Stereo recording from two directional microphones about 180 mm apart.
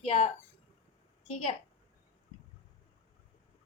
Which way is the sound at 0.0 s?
35° left (ahead or behind).